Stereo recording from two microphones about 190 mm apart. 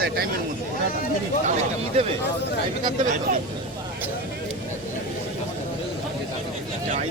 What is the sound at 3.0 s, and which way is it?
Speech, 40° right (ahead or behind).